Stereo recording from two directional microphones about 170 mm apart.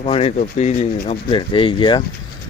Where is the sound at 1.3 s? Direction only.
30° left (ahead or behind).